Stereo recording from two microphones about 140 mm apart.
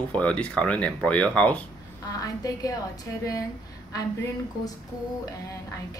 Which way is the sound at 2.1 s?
25° left (ahead or behind).